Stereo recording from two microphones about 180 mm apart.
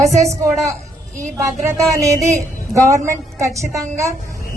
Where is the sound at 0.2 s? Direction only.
15° right (ahead or behind).